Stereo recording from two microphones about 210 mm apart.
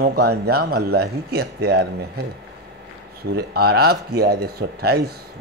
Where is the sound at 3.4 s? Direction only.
50° right (ahead or behind).